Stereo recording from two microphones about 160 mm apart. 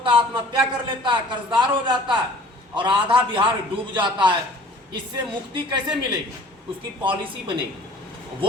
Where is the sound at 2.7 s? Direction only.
30° right (ahead or behind).